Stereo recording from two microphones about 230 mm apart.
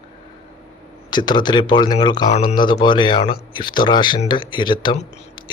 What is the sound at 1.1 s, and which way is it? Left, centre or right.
Speech, centre.